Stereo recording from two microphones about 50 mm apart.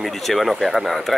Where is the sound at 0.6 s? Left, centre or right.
Centre.